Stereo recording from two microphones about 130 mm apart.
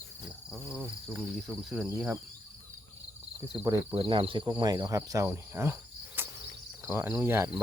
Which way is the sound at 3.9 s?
40° right (ahead or behind).